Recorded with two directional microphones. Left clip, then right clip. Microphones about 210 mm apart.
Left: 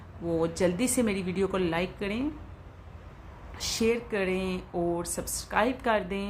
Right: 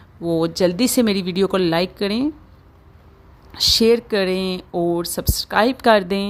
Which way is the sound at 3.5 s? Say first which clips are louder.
Right 13 dB; 45° right (ahead or behind).